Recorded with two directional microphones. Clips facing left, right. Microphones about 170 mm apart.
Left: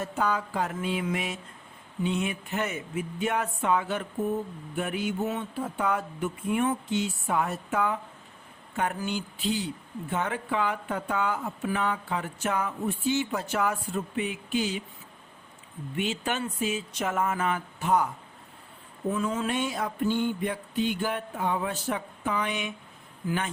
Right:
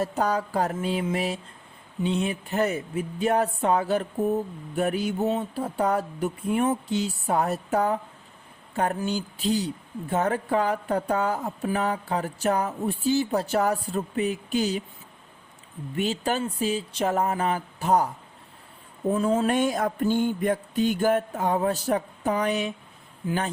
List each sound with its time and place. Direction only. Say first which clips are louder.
0.0 s speech: right 3 dB; 40° right (ahead or behind)
16.0 s speech: right 4 dB; 35° right (ahead or behind)
19.1 s a sound: right 7 dB; 35° right (ahead or behind)